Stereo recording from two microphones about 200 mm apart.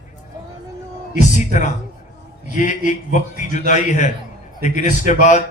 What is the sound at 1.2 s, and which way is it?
A man's voice, 35° left (ahead or behind).